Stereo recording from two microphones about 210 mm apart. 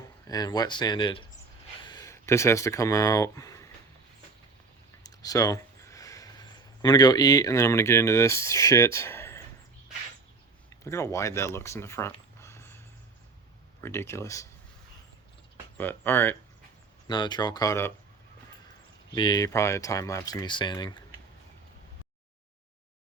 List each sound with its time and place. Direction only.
0.3 s speech: 20° left (ahead or behind)
5.0 s speech: 15° left (ahead or behind)
10.7 s speech: 15° left (ahead or behind)
12.4 s a sound: 10° left (ahead or behind)
13.8 s speech: 10° left (ahead or behind)
15.8 s speech: 10° left (ahead or behind)
17.1 s speech: 20° left (ahead or behind)
19.1 s speech: 20° left (ahead or behind)